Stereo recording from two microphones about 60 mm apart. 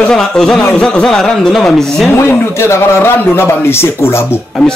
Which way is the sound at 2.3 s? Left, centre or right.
Left.